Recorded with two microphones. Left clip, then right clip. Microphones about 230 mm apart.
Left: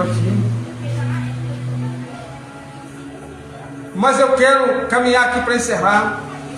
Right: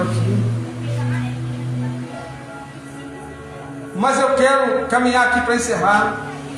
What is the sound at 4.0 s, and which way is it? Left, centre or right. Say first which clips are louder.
A man's voice: left 2 dB; left.